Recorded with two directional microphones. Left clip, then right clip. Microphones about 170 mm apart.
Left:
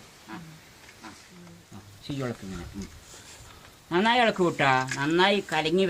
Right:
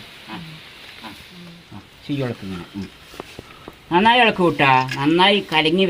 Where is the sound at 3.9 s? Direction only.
40° right (ahead or behind).